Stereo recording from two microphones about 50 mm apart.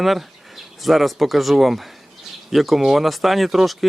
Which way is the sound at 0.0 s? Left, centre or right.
Centre.